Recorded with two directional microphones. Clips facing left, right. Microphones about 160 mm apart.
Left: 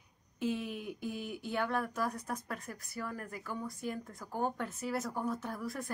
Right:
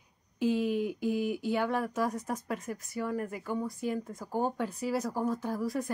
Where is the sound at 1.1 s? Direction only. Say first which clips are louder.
Right 6 dB; 10° right (ahead or behind).